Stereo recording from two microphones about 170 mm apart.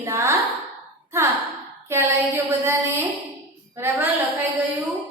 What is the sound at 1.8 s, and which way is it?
A woman's voice, 15° right (ahead or behind).